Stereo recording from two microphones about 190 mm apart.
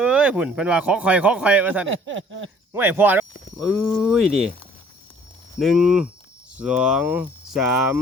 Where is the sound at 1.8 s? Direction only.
85° right.